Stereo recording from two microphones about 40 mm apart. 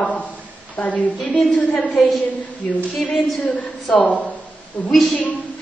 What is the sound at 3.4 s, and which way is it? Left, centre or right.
Speech, left.